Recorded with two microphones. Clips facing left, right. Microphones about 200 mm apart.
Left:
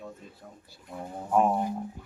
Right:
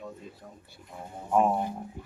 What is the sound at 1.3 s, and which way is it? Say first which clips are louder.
Speech: even; centre (ahead or behind).